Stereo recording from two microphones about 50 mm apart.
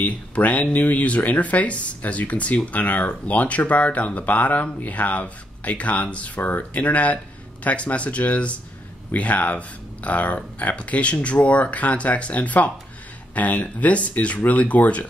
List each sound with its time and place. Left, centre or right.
0.0 s speech: left